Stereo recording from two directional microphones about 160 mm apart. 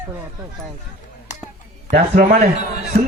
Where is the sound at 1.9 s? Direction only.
70° right (ahead or behind).